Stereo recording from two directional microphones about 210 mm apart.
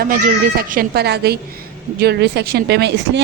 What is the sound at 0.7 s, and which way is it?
A woman's voice, 45° right (ahead or behind).